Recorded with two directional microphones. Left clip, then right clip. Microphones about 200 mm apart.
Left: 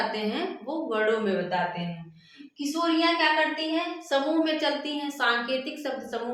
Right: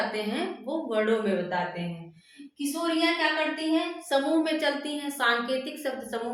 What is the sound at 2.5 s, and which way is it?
A woman's voice, 15° right (ahead or behind).